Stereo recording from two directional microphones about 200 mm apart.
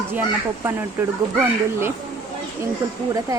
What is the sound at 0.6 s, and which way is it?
Speech, 10° right (ahead or behind).